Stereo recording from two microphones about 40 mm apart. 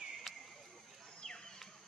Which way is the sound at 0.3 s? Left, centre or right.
Centre.